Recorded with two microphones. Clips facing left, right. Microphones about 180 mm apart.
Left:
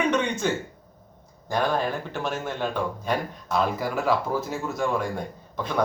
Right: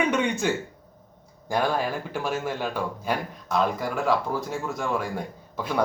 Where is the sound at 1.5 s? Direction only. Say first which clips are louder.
Even; 10° right (ahead or behind).